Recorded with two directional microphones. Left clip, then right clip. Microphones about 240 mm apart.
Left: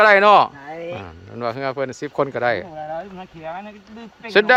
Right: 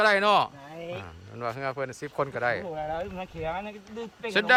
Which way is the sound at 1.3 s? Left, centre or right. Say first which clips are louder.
Left 8 dB; left.